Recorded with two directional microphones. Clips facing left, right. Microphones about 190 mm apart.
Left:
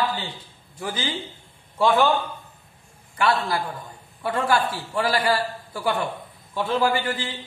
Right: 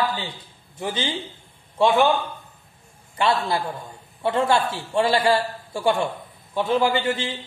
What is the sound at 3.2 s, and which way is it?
A man's voice, 25° right (ahead or behind).